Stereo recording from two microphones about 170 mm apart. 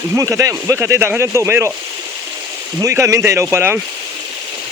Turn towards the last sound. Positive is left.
turn(degrees=-15)  # may be behind; listen again after turning